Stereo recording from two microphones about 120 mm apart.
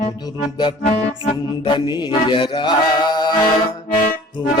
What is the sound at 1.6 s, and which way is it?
Mantra, 45° left (ahead or behind).